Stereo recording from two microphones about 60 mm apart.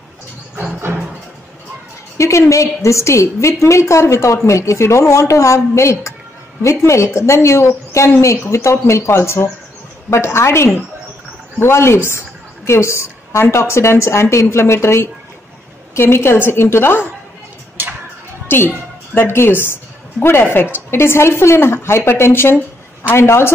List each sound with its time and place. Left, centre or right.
2.1 s a woman's voice: left
18.5 s a woman's voice: left